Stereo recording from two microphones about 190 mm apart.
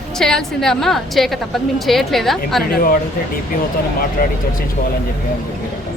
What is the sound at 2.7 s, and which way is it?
Speech, 50° left (ahead or behind).